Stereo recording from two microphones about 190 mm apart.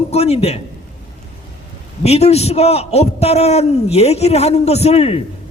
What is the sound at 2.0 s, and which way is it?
A man's voice, 35° left (ahead or behind).